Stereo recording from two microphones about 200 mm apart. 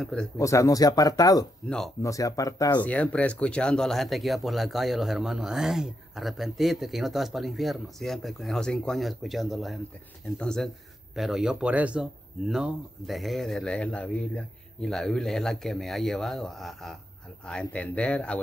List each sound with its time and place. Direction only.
0.0 s speech: 5° left (ahead or behind)
0.4 s speech: 15° left (ahead or behind)
2.8 s speech: 5° left (ahead or behind)